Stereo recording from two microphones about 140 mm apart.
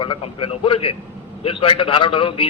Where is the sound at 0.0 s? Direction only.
35° left (ahead or behind).